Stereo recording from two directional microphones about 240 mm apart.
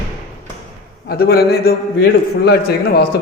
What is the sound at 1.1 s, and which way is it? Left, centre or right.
Speech, left.